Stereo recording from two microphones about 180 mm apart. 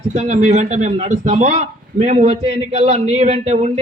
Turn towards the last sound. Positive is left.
turn(degrees=-35)  # may be behind; listen again after turning